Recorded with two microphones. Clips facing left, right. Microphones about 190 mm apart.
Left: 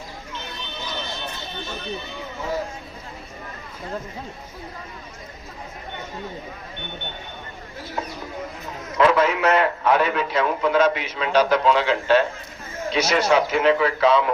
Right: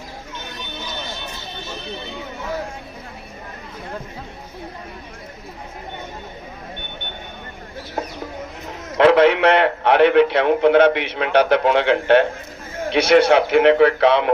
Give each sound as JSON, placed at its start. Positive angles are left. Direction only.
{"t": 9.0, "sound": "a man's voice", "side_deg": -70}